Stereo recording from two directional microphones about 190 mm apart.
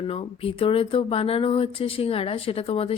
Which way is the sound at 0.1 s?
30° left (ahead or behind).